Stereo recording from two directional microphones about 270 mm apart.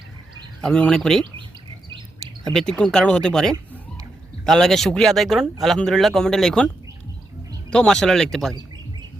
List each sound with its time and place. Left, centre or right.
0.6 s speech: centre
2.5 s speech: centre
7.7 s speech: centre